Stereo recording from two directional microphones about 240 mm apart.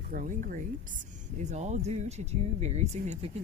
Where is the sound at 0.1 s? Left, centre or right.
Right.